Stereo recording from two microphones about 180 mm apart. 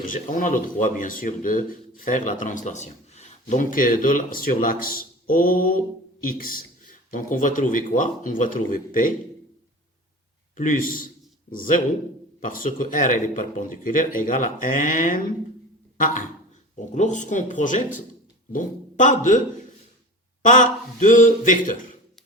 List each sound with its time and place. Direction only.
0.0 s speech: 50° left (ahead or behind)
10.6 s speech: 45° left (ahead or behind)
16.0 s a sound: 45° left (ahead or behind)
16.9 s speech: 40° left (ahead or behind)
20.4 s speech: 45° left (ahead or behind)